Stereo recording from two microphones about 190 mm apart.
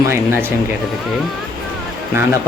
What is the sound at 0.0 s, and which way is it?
Speech, 10° right (ahead or behind).